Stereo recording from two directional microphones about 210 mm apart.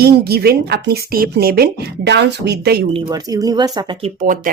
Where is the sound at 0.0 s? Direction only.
50° right (ahead or behind).